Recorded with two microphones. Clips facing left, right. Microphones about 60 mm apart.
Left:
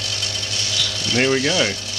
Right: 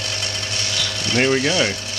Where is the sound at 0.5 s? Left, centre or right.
Right.